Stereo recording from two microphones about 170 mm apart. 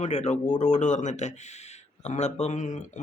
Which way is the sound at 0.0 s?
45° left (ahead or behind).